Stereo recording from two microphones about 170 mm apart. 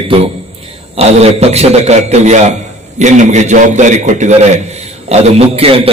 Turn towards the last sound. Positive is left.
turn(degrees=-35)  # may be behind; listen again after turning